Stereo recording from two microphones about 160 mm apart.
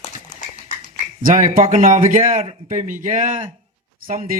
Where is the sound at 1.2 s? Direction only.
55° right (ahead or behind).